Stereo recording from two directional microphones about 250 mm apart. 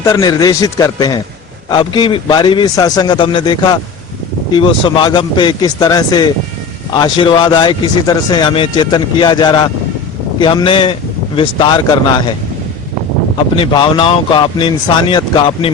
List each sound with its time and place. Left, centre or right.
0.1 s speech: centre
13.6 s speech: centre